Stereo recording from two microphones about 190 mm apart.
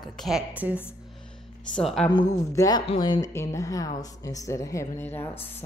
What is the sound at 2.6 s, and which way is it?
Speech, 20° left (ahead or behind).